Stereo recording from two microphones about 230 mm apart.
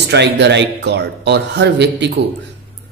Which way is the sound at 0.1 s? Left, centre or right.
Right.